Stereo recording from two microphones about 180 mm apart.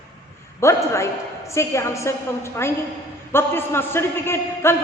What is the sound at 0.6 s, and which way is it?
A man's voice, 15° left (ahead or behind).